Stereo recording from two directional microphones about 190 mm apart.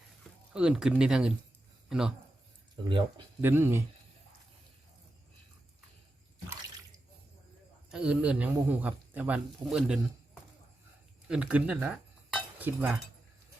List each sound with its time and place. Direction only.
0.5 s speech: 5° right (ahead or behind)
2.7 s speech: 25° right (ahead or behind)
3.4 s speech: 10° right (ahead or behind)
7.9 s speech: 5° right (ahead or behind)
11.3 s speech: 5° right (ahead or behind)